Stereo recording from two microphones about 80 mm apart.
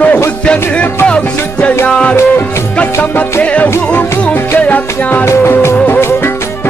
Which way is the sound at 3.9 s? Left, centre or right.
Left.